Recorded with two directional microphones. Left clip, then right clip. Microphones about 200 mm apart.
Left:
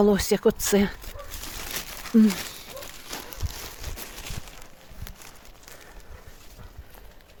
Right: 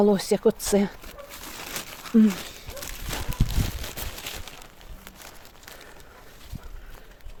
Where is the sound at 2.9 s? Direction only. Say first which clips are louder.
Right 4 dB; 45° right (ahead or behind).